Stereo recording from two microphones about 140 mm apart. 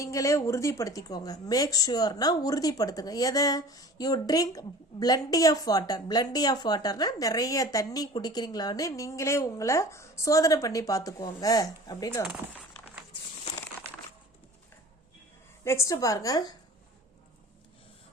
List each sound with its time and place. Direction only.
0.0 s a woman's voice: 25° left (ahead or behind)
15.6 s a woman's voice: 20° left (ahead or behind)